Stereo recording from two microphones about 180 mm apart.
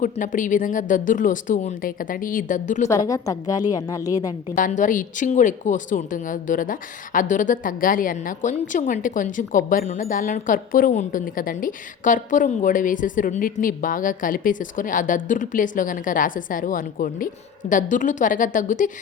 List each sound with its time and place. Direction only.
0.0 s a woman's voice: 45° left (ahead or behind)
3.1 s a woman's voice: 20° left (ahead or behind)
4.5 s a woman's voice: 45° left (ahead or behind)